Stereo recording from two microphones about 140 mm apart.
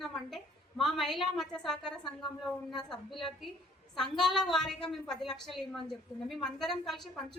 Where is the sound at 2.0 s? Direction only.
30° left (ahead or behind).